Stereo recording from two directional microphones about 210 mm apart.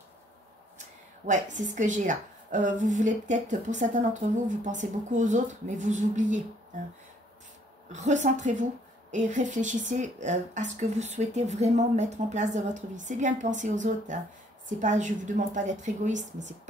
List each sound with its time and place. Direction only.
0.7 s a woman's voice: 35° right (ahead or behind)
7.9 s speech: 35° right (ahead or behind)